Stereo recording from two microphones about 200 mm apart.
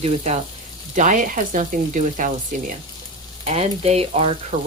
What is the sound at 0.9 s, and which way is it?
Speech, 40° right (ahead or behind).